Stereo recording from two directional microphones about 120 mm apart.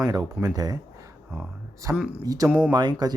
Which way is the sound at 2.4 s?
5° right (ahead or behind).